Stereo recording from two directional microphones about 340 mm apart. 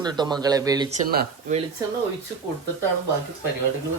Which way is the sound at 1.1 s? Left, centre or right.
Right.